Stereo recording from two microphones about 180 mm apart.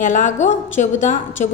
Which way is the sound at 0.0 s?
45° left (ahead or behind).